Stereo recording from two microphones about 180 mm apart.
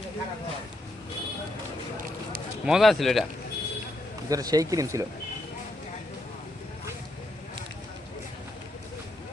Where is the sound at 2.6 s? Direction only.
Centre (ahead or behind).